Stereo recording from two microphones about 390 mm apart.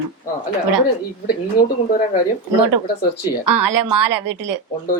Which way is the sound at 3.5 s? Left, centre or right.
Right.